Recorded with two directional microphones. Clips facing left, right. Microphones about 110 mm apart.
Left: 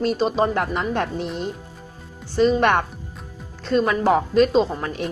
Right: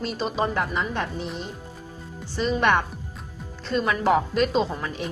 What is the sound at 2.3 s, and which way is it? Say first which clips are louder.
A woman's voice: left 5 dB; 40° left (ahead or behind).